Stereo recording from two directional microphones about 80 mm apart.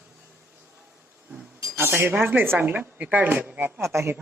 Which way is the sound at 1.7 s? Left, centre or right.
Right.